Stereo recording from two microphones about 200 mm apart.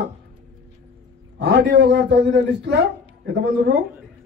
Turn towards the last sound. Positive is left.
turn(degrees=-55)  # may be behind; listen again after turning